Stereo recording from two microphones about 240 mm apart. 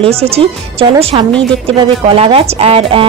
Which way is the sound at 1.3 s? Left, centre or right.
Centre.